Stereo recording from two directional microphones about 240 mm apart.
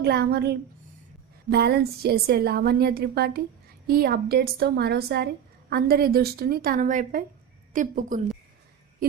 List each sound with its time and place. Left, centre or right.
0.0 s a woman's voice: right